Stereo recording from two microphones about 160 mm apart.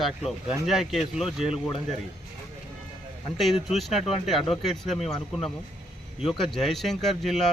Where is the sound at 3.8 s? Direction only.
Centre (ahead or behind).